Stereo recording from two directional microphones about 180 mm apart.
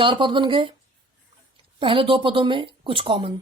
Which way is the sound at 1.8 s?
30° right (ahead or behind).